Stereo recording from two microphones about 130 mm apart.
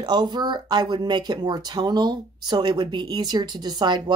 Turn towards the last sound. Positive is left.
turn(degrees=-35)  # may be behind; listen again after turning